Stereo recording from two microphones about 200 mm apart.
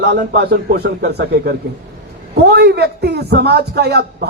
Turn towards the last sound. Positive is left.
turn(degrees=-55)  # may be behind; listen again after turning